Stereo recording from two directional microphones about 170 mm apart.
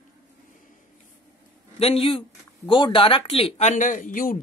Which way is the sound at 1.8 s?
35° left (ahead or behind).